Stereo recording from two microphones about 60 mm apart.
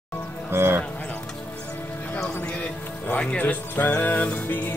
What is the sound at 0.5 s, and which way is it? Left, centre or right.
Music, right.